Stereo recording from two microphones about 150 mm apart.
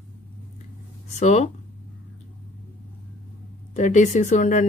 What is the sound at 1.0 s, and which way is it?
Speech, 50° left (ahead or behind).